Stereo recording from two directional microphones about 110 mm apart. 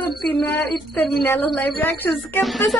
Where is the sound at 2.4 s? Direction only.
Centre (ahead or behind).